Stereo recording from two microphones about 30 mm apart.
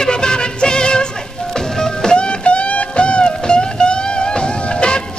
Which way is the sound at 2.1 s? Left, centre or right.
Left.